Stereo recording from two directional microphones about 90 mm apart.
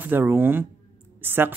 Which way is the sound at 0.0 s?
20° right (ahead or behind).